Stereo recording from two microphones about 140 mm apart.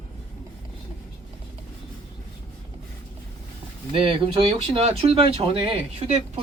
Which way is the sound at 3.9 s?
40° right (ahead or behind).